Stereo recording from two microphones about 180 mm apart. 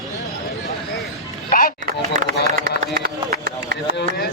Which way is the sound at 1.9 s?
55° right (ahead or behind).